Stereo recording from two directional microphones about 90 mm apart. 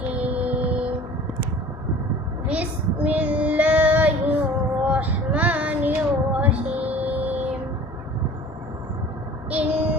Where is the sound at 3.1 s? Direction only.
15° right (ahead or behind).